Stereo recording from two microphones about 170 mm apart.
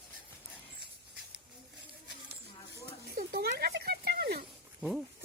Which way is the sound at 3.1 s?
70° right (ahead or behind).